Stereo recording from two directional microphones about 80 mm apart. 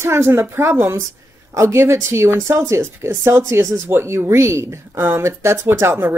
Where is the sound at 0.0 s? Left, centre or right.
Right.